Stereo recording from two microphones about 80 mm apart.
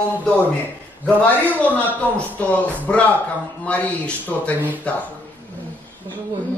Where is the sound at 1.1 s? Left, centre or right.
Centre.